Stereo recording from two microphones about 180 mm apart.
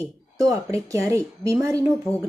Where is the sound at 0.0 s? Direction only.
20° right (ahead or behind).